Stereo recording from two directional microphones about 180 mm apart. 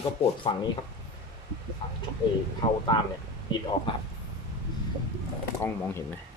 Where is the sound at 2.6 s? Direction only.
20° left (ahead or behind).